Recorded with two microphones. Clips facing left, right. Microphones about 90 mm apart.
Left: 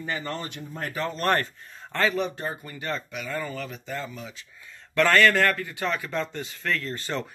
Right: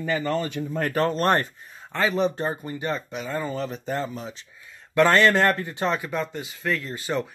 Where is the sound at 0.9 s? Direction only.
55° right (ahead or behind).